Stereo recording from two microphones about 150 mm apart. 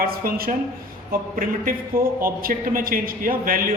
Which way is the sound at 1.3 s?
65° right (ahead or behind).